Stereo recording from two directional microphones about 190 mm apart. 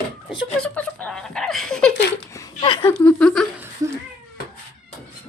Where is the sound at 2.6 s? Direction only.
25° left (ahead or behind).